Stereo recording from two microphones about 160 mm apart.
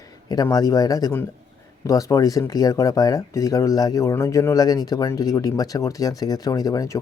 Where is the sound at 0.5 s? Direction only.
25° left (ahead or behind).